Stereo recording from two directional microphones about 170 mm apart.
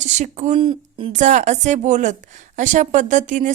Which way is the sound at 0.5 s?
30° right (ahead or behind).